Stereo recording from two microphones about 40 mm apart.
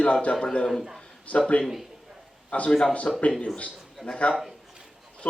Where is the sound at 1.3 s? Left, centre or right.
Left.